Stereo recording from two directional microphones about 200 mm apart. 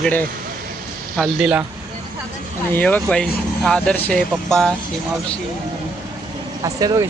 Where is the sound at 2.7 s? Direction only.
10° left (ahead or behind).